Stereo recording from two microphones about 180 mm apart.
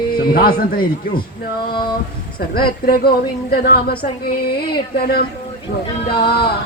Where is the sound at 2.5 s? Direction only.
55° left (ahead or behind).